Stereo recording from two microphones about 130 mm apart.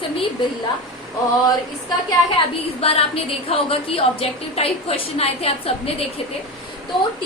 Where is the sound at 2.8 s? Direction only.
50° left (ahead or behind).